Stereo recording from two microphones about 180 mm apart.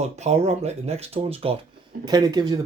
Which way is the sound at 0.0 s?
35° right (ahead or behind).